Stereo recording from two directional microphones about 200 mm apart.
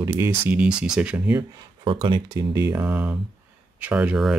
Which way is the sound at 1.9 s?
25° right (ahead or behind).